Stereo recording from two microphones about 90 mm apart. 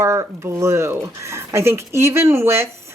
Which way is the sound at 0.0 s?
30° right (ahead or behind).